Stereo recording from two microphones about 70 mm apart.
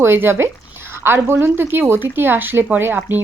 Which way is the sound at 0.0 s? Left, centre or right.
Right.